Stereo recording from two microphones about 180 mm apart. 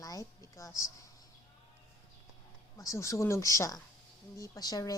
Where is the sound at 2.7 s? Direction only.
15° left (ahead or behind).